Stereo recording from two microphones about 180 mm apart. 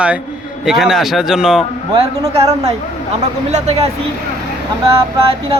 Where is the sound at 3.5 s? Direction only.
40° right (ahead or behind).